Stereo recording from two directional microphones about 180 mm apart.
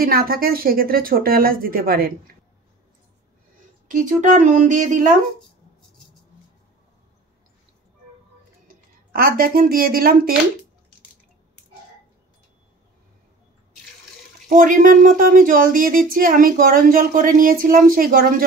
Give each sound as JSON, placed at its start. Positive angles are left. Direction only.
{"t": 0.0, "sound": "speech", "side_deg": -55}
{"t": 3.9, "sound": "speech", "side_deg": -45}
{"t": 8.6, "sound": "speech", "side_deg": -55}
{"t": 14.5, "sound": "speech", "side_deg": -45}